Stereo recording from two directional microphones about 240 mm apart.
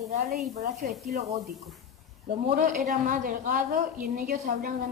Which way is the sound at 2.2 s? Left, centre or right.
Right.